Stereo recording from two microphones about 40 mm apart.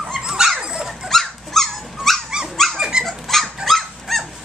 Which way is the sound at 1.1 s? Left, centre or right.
Centre.